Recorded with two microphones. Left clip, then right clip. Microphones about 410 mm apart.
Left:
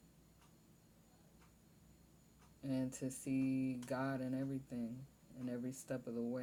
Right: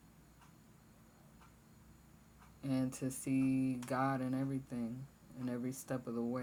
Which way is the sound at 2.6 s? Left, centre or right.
Left.